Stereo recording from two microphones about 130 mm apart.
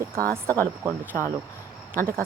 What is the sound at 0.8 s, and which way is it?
Speech, 15° right (ahead or behind).